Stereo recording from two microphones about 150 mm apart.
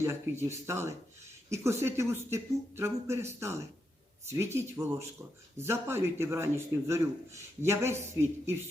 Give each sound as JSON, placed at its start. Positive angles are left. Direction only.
{"t": 0.0, "sound": "a man's voice", "side_deg": -20}